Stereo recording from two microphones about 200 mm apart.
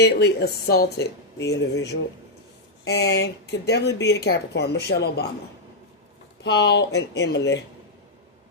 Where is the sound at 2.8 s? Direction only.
55° left (ahead or behind).